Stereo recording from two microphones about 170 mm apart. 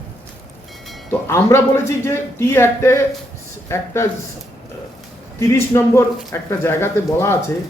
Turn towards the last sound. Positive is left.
turn(degrees=15)  # may be behind; listen again after turning